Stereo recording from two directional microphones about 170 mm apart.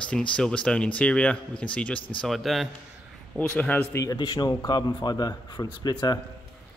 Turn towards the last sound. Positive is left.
turn(degrees=25)  # may be behind; listen again after turning